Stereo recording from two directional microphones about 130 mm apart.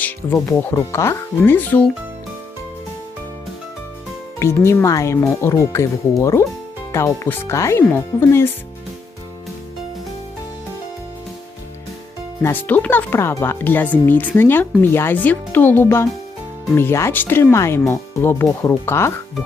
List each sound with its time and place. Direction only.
0.4 s speech: 20° left (ahead or behind)
4.4 s speech: 20° left (ahead or behind)
12.4 s speech: 15° left (ahead or behind)